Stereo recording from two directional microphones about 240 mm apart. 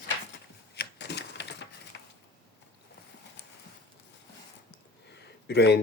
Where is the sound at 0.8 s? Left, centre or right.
Left.